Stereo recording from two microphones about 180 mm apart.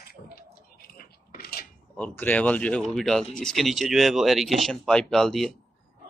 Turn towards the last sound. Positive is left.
turn(degrees=0)  # may be behind; listen again after turning